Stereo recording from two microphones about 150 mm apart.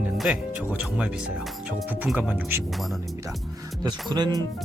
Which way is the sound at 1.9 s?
10° right (ahead or behind).